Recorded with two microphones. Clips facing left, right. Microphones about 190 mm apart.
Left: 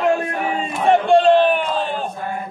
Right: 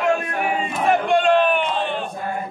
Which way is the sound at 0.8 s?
30° left (ahead or behind).